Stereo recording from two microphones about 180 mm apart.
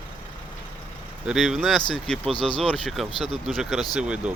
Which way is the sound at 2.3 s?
30° left (ahead or behind).